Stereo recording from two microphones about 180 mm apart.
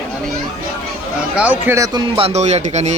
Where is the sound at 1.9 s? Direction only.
30° right (ahead or behind).